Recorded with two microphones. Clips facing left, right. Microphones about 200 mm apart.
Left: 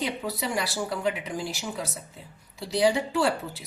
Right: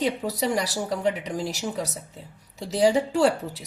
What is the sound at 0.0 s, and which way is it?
A woman's voice, 40° right (ahead or behind).